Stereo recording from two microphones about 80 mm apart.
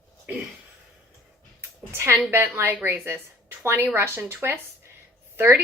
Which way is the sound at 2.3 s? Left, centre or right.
Right.